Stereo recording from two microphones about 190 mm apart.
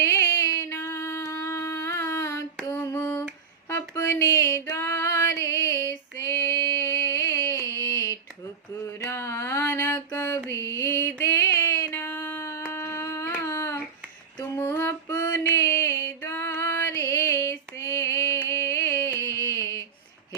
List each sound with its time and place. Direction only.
0.0 s a sound: 15° left (ahead or behind)
2.6 s mantra: 15° left (ahead or behind)
3.7 s music: 15° left (ahead or behind)
7.6 s a sound: 15° left (ahead or behind)
10.5 s mantra: 15° left (ahead or behind)
14.3 s female singing: 15° left (ahead or behind)